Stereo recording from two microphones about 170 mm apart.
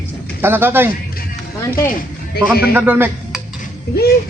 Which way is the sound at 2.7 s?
10° right (ahead or behind).